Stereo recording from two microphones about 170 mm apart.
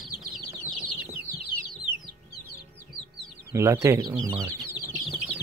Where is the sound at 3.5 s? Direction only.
15° right (ahead or behind).